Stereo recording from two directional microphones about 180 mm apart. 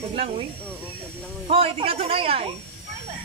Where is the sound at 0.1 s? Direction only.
30° right (ahead or behind).